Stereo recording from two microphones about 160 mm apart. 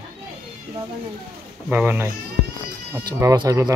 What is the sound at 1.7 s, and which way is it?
Speech, 10° right (ahead or behind).